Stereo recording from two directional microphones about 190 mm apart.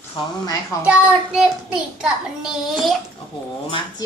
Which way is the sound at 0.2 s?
25° left (ahead or behind).